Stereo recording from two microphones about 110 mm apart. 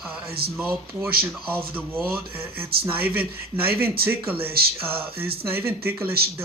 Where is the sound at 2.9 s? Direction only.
20° right (ahead or behind).